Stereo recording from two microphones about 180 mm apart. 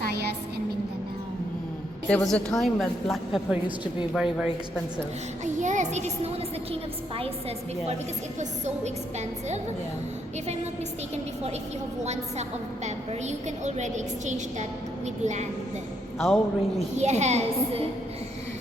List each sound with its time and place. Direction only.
0.0 s music: 65° right (ahead or behind)
2.0 s a woman's voice: 5° left (ahead or behind)
5.5 s a woman's voice: 40° right (ahead or behind)
8.4 s a woman's voice: 40° right (ahead or behind)
12.0 s a woman's voice: 40° right (ahead or behind)
16.1 s a man's voice: centre (ahead or behind)
17.0 s a woman's voice: 40° right (ahead or behind)